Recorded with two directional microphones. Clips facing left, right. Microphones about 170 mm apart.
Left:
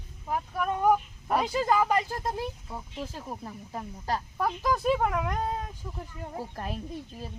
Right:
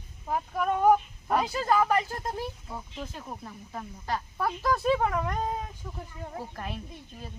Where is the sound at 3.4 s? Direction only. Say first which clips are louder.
Left 2 dB; 30° left (ahead or behind).